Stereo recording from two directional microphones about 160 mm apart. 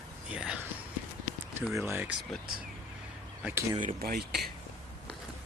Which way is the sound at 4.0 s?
75° right (ahead or behind).